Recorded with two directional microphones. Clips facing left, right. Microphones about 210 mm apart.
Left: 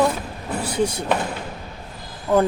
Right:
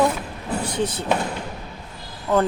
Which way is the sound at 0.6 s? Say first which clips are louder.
Left 4 dB; 10° left (ahead or behind).